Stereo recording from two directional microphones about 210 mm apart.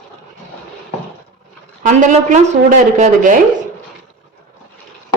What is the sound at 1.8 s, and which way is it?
A woman's voice, 35° right (ahead or behind).